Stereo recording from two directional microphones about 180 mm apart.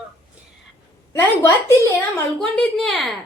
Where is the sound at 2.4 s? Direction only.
Centre (ahead or behind).